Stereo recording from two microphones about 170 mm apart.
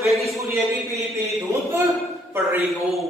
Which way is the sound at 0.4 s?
15° right (ahead or behind).